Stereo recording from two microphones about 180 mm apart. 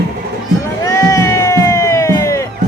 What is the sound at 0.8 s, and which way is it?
Music, 15° left (ahead or behind).